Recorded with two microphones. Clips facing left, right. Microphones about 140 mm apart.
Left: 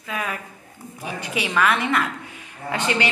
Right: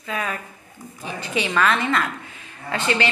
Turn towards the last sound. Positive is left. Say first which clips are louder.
# even
turn(degrees=15)  # may be behind; listen again after turning